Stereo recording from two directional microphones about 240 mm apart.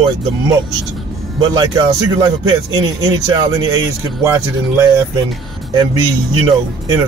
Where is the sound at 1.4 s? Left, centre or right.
Centre.